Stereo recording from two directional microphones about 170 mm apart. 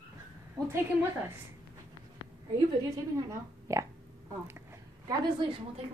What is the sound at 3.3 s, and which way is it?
Speech, 15° right (ahead or behind).